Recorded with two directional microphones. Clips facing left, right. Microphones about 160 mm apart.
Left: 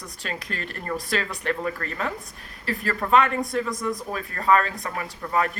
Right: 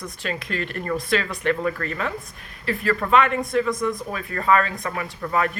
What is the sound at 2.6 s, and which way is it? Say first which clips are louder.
Speech: right 4 dB; 40° left (ahead or behind).